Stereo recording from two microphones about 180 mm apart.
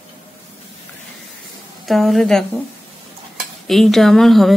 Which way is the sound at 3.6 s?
Centre (ahead or behind).